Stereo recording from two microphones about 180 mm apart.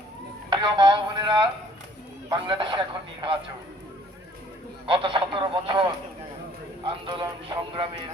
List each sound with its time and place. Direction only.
0.5 s a man's voice: 25° right (ahead or behind)
4.9 s a man's voice: 30° right (ahead or behind)
6.8 s a man's voice: 30° right (ahead or behind)